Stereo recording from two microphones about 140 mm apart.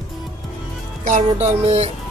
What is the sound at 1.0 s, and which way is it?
Music, 55° right (ahead or behind).